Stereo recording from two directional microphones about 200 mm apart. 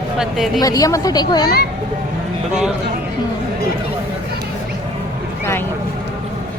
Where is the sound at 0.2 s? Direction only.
Centre (ahead or behind).